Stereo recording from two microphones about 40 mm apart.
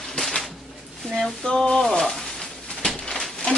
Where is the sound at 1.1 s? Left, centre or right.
Centre.